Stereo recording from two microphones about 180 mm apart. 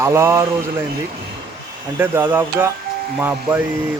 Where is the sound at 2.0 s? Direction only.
10° right (ahead or behind).